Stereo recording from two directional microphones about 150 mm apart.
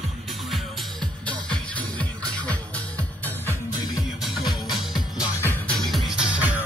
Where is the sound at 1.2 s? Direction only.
10° left (ahead or behind).